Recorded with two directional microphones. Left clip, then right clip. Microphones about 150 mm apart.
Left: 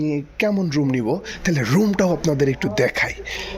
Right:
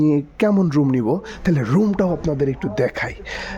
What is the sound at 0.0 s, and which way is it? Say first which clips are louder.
Speech: right 4 dB; 50° right (ahead or behind).